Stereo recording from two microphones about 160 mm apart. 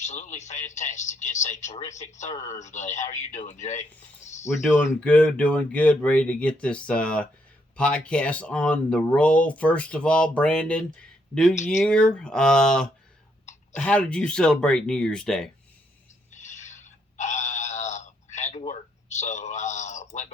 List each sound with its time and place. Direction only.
0.0 s a man's voice: 45° left (ahead or behind)
4.4 s speech: 15° left (ahead or behind)
11.5 s a man's voice: 45° left (ahead or behind)
11.8 s speech: 5° left (ahead or behind)
16.3 s a sound: 45° left (ahead or behind)